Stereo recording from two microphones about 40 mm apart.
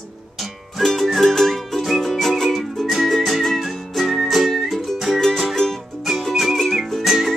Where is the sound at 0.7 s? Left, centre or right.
Centre.